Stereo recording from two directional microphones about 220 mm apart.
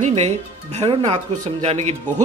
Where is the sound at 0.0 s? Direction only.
30° right (ahead or behind).